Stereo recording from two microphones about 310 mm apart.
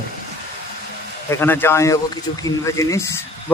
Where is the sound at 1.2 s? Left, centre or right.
Centre.